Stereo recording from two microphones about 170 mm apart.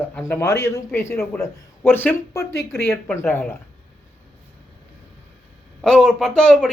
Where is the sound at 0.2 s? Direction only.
15° left (ahead or behind).